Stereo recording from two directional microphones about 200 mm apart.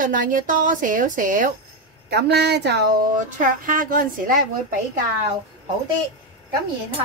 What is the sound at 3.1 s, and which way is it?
A woman's voice, 40° right (ahead or behind).